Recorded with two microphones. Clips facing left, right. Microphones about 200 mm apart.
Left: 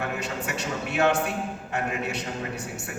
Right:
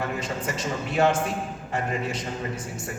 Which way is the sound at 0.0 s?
70° left (ahead or behind).